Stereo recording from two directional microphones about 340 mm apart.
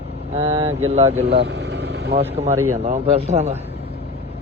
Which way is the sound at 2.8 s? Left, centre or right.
Centre.